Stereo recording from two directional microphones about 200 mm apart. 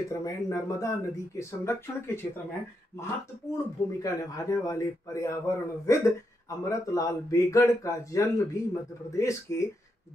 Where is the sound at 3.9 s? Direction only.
15° left (ahead or behind).